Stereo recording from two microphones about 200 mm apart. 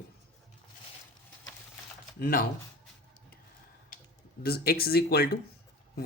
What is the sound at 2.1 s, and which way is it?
Speech, 45° left (ahead or behind).